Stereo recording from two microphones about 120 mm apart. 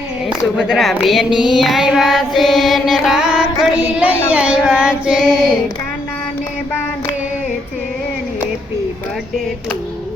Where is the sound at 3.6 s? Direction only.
10° right (ahead or behind).